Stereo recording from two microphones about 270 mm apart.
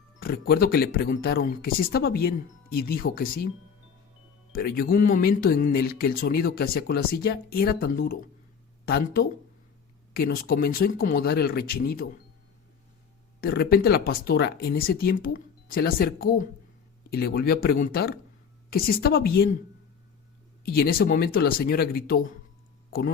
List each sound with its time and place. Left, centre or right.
0.2 s speech: left
4.5 s speech: left
13.4 s speech: left
20.7 s speech: left